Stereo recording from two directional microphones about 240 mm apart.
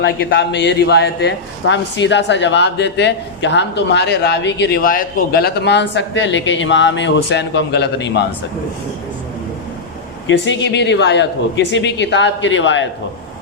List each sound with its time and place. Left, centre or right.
0.0 s speech: left
10.2 s speech: left